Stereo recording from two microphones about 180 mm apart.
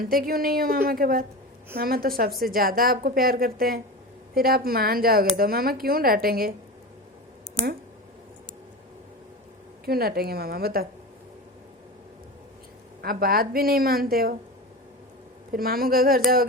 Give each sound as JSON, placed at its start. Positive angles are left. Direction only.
{"t": 0.0, "sound": "a woman's voice", "side_deg": -55}
{"t": 9.8, "sound": "a woman's voice", "side_deg": -60}
{"t": 13.0, "sound": "a woman's voice", "side_deg": -55}
{"t": 15.5, "sound": "a woman's voice", "side_deg": -55}